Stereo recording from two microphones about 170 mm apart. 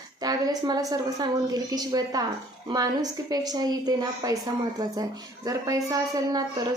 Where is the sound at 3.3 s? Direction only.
25° right (ahead or behind).